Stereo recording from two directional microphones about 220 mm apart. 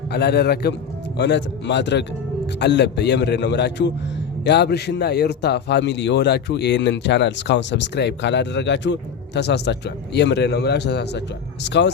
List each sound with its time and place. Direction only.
0.1 s a man's voice: 50° left (ahead or behind)